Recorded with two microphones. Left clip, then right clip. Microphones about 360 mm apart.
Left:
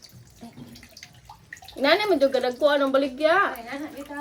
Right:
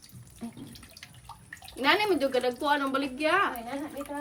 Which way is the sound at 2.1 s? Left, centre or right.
Centre.